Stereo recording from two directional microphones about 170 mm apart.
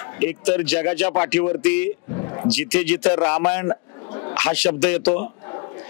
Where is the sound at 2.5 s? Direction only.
5° left (ahead or behind).